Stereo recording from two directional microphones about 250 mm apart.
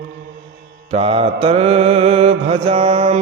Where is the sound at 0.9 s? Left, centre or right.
Right.